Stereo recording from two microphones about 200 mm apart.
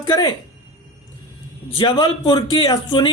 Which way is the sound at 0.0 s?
20° left (ahead or behind).